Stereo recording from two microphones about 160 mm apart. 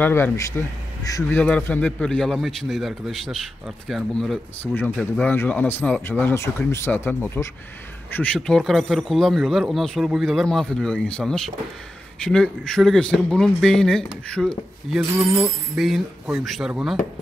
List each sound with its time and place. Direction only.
0.0 s speech: 15° left (ahead or behind)
1.4 s speech: 10° left (ahead or behind)